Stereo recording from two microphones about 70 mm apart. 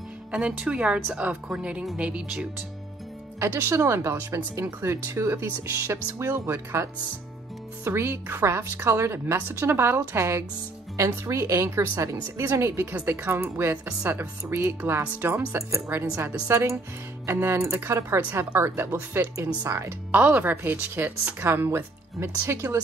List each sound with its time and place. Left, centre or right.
0.3 s speech: centre
3.3 s speech: right
20.1 s a woman's voice: right